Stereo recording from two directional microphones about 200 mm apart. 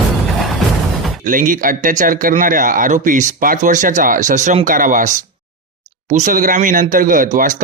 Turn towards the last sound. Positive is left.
turn(degrees=-40)  # may be behind; listen again after turning